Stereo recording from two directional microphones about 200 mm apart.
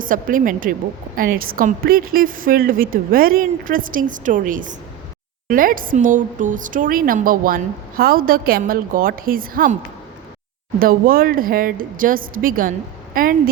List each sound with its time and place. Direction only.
0.0 s a woman's voice: 45° right (ahead or behind)
10.8 s a woman's voice: 45° right (ahead or behind)